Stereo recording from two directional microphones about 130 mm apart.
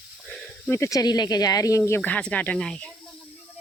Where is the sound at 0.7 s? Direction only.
20° left (ahead or behind).